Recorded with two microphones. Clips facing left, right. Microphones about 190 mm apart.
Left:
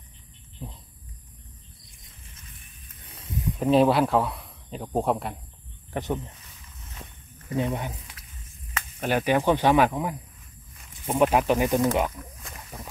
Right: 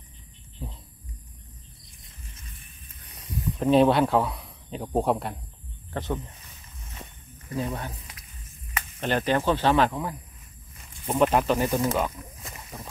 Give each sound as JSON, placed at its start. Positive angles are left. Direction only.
{"t": 0.6, "sound": "a sound", "side_deg": -5}
{"t": 3.1, "sound": "a sound", "side_deg": 25}
{"t": 3.5, "sound": "speech", "side_deg": 5}
{"t": 5.9, "sound": "speech", "side_deg": 15}
{"t": 7.5, "sound": "speech", "side_deg": 15}
{"t": 9.0, "sound": "speech", "side_deg": 10}
{"t": 12.2, "sound": "speech", "side_deg": -20}